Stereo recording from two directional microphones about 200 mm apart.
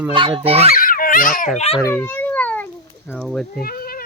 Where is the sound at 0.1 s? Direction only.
25° right (ahead or behind).